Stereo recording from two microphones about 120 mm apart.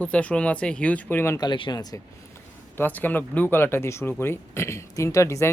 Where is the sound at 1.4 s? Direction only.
40° left (ahead or behind).